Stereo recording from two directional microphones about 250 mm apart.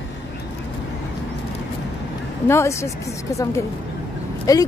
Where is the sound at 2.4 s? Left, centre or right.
Centre.